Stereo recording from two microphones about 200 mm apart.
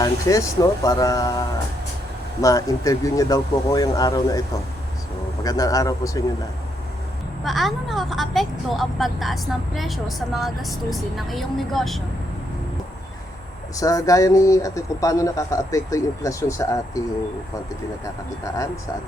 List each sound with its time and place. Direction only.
0.0 s speech: 15° left (ahead or behind)
2.4 s speech: 15° left (ahead or behind)
7.4 s speech: centre (ahead or behind)
13.7 s speech: 15° left (ahead or behind)